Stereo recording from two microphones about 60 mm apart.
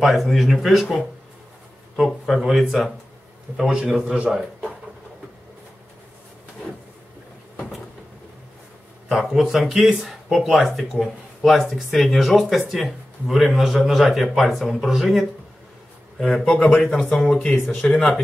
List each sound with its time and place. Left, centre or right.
0.0 s speech: centre
2.0 s speech: centre
3.8 s a man's voice: centre
9.3 s speech: centre
16.2 s speech: centre